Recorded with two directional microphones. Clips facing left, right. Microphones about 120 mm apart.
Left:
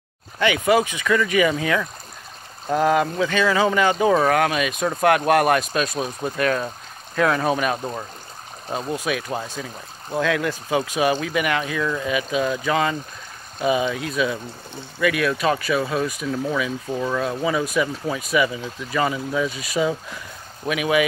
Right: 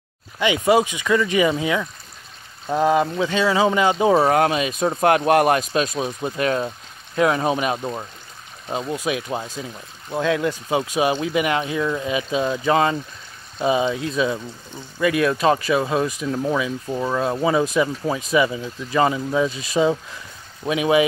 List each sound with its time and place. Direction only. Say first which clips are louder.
0.4 s speech: right 1 dB; 20° right (ahead or behind)
8.9 s speech: even; 25° right (ahead or behind)
16.9 s speech: right 1 dB; 10° right (ahead or behind)
17.2 s speech: right 3 dB; 30° right (ahead or behind)